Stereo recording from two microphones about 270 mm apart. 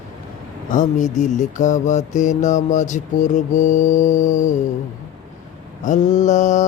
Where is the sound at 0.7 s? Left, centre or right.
Left.